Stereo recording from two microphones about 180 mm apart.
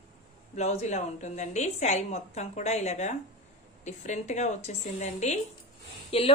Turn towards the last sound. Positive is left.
turn(degrees=35)  # may be behind; listen again after turning